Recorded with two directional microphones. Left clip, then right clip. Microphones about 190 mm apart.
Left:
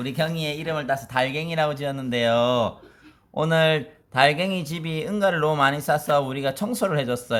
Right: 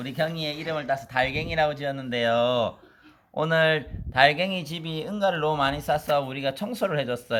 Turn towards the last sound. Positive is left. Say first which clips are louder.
# left 2 dB
turn(degrees=5)  # may be behind; listen again after turning